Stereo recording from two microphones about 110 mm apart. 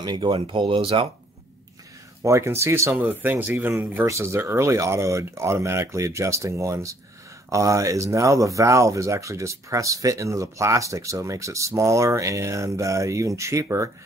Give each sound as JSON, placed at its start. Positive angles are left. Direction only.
{"t": 0.0, "sound": "speech", "side_deg": -45}
{"t": 2.2, "sound": "speech", "side_deg": -25}